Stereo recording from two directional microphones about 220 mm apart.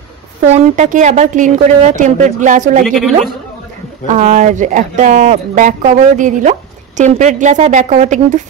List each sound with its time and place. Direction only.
0.7 s speech: 35° right (ahead or behind)
2.8 s speech: centre (ahead or behind)
4.1 s speech: 35° right (ahead or behind)